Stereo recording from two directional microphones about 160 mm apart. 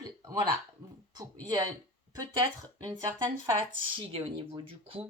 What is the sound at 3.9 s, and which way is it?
Speech, 35° right (ahead or behind).